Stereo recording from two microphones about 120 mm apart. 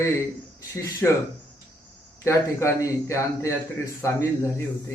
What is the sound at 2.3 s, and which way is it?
A man's voice, 25° left (ahead or behind).